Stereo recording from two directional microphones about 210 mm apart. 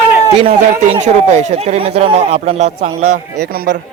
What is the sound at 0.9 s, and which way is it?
Speech, 35° right (ahead or behind).